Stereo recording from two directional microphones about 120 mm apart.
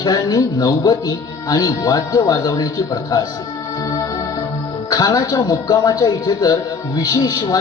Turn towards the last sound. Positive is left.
turn(degrees=30)  # may be behind; listen again after turning